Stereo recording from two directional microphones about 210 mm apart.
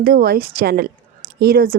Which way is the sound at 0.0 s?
45° right (ahead or behind).